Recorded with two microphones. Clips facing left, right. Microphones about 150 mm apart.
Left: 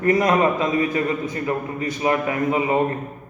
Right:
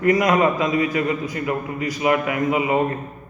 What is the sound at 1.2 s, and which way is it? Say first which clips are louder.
A man's voice: even; 25° left (ahead or behind).